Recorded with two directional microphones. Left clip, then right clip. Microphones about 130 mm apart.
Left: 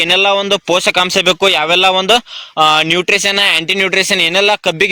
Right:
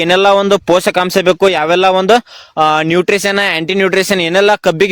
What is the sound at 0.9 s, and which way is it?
A man's voice, 90° right.